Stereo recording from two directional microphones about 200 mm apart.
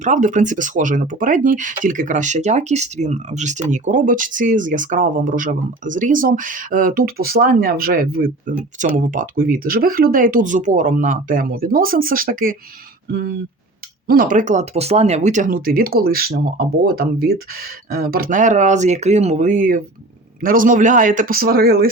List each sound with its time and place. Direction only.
0.0 s speech: 40° right (ahead or behind)
14.1 s speech: 45° right (ahead or behind)